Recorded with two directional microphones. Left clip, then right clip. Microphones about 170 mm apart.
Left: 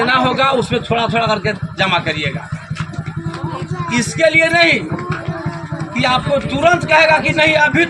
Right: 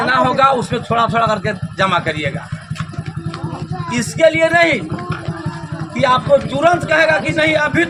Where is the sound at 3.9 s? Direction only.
20° right (ahead or behind).